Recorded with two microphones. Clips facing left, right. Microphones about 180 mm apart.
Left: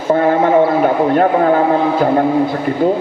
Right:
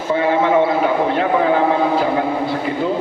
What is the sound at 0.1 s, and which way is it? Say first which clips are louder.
A man's voice: left 4 dB; 50° left (ahead or behind).